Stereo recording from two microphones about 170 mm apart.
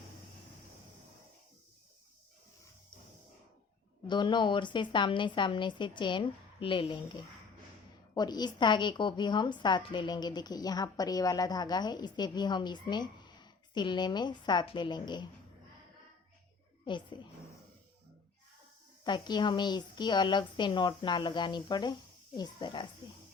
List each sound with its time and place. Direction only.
4.0 s a woman's voice: 25° left (ahead or behind)
8.1 s a woman's voice: 25° left (ahead or behind)
16.8 s a woman's voice: 30° left (ahead or behind)
19.0 s a woman's voice: 25° left (ahead or behind)